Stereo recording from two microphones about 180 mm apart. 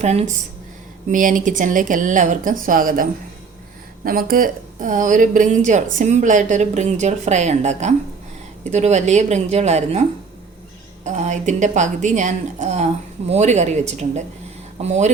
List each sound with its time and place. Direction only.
0.0 s a woman's voice: 40° right (ahead or behind)
11.0 s a woman's voice: 40° right (ahead or behind)